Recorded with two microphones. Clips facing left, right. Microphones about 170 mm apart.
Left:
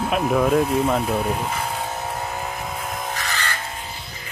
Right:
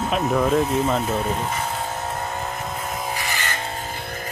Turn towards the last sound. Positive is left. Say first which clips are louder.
# even
turn(degrees=-15)  # may be behind; listen again after turning